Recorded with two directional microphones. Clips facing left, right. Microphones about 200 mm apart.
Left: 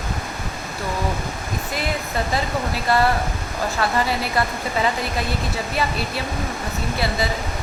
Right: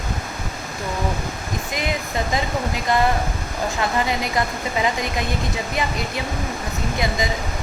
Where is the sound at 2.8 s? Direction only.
15° right (ahead or behind).